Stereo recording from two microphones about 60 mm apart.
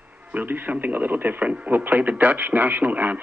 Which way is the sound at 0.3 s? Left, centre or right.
Right.